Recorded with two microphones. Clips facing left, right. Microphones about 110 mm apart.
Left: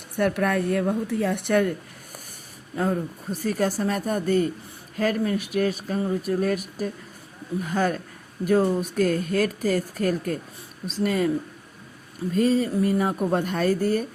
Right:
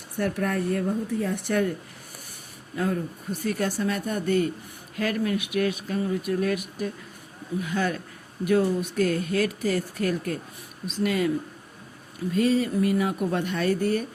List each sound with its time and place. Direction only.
0.2 s a woman's voice: 65° left (ahead or behind)
2.7 s speech: 30° left (ahead or behind)
12.3 s speech: 40° left (ahead or behind)